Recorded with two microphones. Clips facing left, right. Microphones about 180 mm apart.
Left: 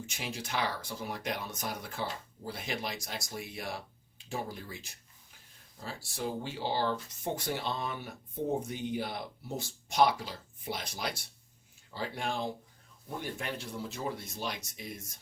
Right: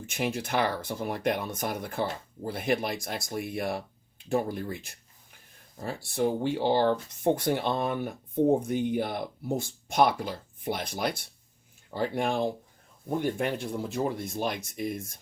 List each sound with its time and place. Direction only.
0.0 s speech: 55° right (ahead or behind)